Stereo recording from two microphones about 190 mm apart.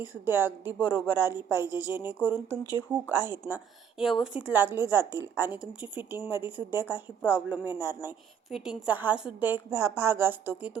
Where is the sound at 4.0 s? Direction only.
Centre (ahead or behind).